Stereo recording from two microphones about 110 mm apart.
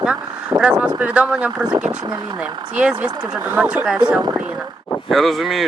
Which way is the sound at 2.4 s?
10° right (ahead or behind).